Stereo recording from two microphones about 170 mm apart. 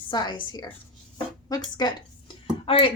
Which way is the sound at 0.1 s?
25° left (ahead or behind).